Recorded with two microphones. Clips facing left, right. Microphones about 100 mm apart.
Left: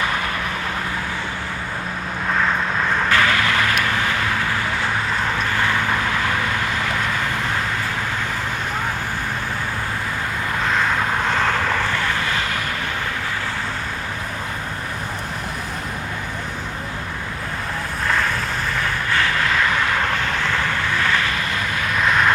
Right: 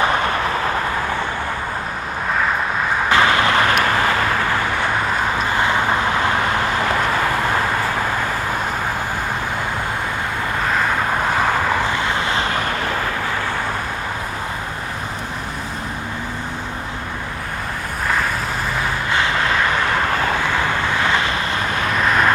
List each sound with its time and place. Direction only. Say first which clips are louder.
0.0 s vehicle: right 5 dB; 35° right (ahead or behind)
3.1 s vehicle: right 5 dB; 25° right (ahead or behind)
5.5 s vehicle: right 4 dB; 20° right (ahead or behind)
11.3 s vehicle: right 3 dB; 10° right (ahead or behind); by 12.7 s 35° right (ahead or behind)
18.8 s vehicle: right 1 dB; 20° right (ahead or behind)
21.0 s vehicle: right 2 dB; 20° right (ahead or behind)